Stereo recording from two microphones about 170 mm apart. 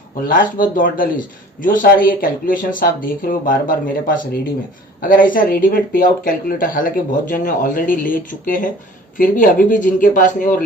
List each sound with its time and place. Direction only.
0.3 s speech: 55° left (ahead or behind)